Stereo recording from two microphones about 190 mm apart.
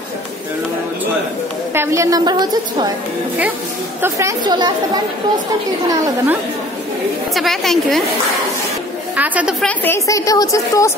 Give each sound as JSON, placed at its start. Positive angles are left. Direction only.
{"t": 1.7, "sound": "a woman's voice", "side_deg": -15}
{"t": 4.0, "sound": "a woman's voice", "side_deg": -15}
{"t": 7.3, "sound": "a woman's voice", "side_deg": 0}
{"t": 9.1, "sound": "a woman's voice", "side_deg": -10}
{"t": 9.7, "sound": "a woman's voice", "side_deg": 15}